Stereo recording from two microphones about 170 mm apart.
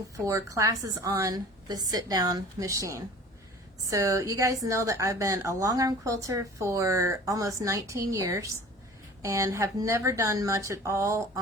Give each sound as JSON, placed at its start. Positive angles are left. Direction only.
{"t": 0.3, "sound": "a woman's voice", "side_deg": -20}